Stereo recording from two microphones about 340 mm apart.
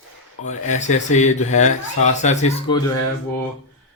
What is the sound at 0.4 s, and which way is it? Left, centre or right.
Speech, left.